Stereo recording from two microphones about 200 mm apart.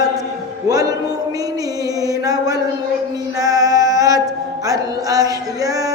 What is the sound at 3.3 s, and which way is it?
Female singing, 15° right (ahead or behind).